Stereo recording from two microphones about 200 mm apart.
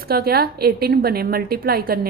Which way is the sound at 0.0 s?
50° right (ahead or behind).